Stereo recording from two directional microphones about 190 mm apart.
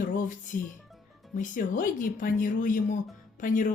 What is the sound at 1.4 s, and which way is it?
Speech, 45° left (ahead or behind).